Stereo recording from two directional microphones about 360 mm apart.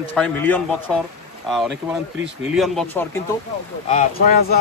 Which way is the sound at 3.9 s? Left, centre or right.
Left.